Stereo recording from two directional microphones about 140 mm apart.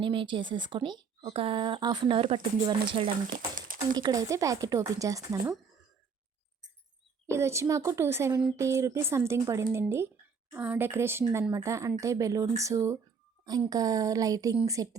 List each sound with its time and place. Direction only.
0.0 s speech: 35° right (ahead or behind)
3.2 s speech: 80° right
3.9 s speech: 25° right (ahead or behind)
7.3 s a woman's voice: 20° right (ahead or behind)